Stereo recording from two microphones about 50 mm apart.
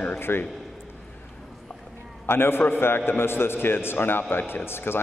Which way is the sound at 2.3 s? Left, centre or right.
Left.